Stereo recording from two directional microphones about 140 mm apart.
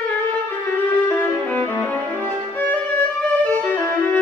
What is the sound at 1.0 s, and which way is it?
Music, 15° left (ahead or behind).